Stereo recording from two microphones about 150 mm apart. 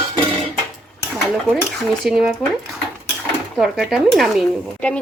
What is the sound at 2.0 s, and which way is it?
Speech, 5° right (ahead or behind).